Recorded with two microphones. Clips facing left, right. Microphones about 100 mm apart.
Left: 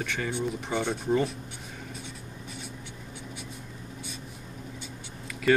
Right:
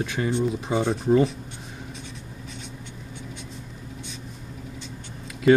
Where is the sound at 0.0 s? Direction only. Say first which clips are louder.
Right 6 dB; 10° right (ahead or behind).